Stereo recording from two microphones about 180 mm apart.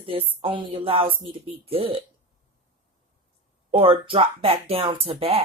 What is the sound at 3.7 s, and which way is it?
Speech, 30° right (ahead or behind).